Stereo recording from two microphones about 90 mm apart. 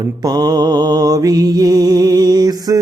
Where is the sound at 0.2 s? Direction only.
50° right (ahead or behind).